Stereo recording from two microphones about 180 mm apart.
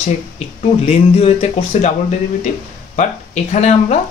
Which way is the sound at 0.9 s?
35° left (ahead or behind).